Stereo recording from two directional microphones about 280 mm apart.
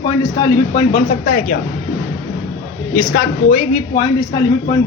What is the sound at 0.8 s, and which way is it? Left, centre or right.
Speech, left.